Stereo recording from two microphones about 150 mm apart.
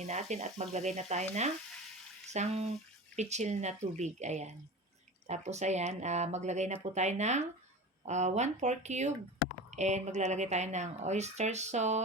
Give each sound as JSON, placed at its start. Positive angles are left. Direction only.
{"t": 0.0, "sound": "speech", "side_deg": -50}